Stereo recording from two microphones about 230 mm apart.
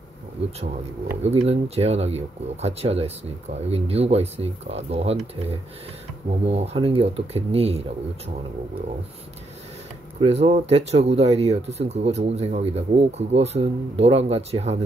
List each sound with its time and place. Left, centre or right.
1.2 s speech: right
10.2 s speech: right